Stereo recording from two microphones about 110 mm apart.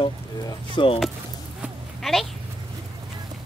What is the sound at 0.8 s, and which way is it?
Speech, 50° left (ahead or behind).